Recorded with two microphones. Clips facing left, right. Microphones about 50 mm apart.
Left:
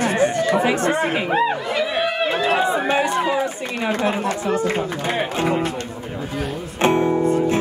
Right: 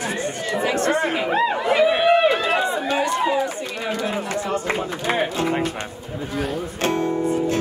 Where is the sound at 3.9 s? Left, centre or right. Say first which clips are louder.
Left 5 dB; left.